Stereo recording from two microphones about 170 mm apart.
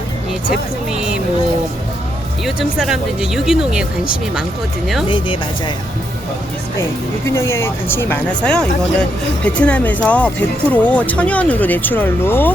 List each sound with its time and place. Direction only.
2.4 s speech: centre (ahead or behind)
5.0 s speech: 30° left (ahead or behind)
7.3 s speech: 15° left (ahead or behind)